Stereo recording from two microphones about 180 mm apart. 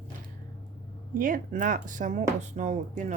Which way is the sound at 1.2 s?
50° right (ahead or behind).